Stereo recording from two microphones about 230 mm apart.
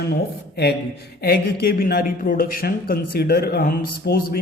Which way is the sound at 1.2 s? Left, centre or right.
Left.